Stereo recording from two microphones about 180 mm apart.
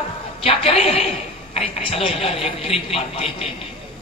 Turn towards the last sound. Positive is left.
turn(degrees=35)  # may be behind; listen again after turning